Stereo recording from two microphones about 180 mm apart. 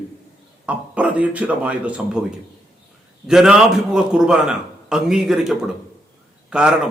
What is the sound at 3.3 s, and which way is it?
A man's voice, 5° right (ahead or behind).